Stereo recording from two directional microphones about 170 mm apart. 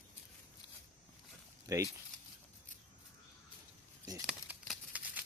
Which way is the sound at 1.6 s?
20° right (ahead or behind).